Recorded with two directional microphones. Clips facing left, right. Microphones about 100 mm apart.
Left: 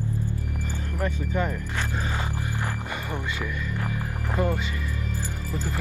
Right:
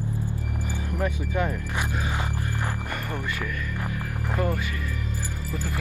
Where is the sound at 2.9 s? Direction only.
15° left (ahead or behind).